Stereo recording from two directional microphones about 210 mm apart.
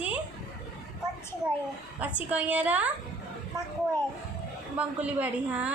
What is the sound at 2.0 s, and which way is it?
Speech, 5° right (ahead or behind).